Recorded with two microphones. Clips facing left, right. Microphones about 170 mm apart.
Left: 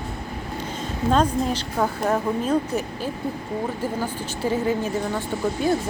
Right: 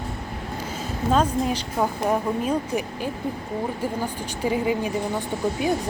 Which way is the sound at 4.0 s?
15° right (ahead or behind).